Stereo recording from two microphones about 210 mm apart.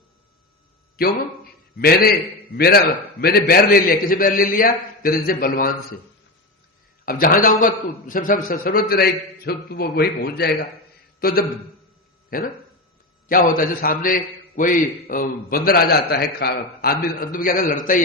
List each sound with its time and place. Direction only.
1.0 s a man's voice: 45° left (ahead or behind)
7.0 s a man's voice: 45° left (ahead or behind)